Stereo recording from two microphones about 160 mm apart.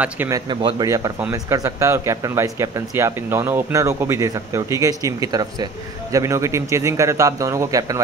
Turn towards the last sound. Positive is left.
turn(degrees=-20)  # may be behind; listen again after turning